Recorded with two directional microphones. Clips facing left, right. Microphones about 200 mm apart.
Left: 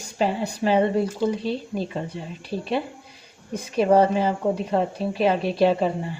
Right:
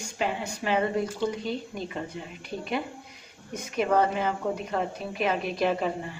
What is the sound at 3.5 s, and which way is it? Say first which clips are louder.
A woman's voice: left 6 dB; 30° left (ahead or behind).